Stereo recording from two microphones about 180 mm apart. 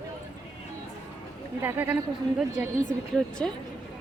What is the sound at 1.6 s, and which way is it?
A woman's voice, 10° right (ahead or behind).